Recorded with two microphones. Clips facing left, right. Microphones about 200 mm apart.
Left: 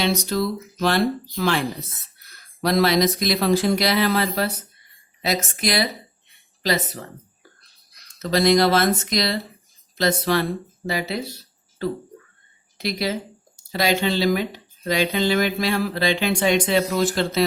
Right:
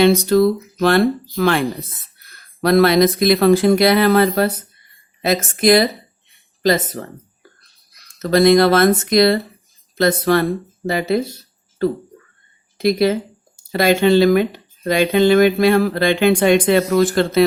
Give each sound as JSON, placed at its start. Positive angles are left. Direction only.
{"t": 0.0, "sound": "speech", "side_deg": -55}
{"t": 8.2, "sound": "speech", "side_deg": -55}
{"t": 12.7, "sound": "speech", "side_deg": -50}